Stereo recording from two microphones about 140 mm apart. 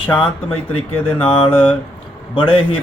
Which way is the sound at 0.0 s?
35° left (ahead or behind).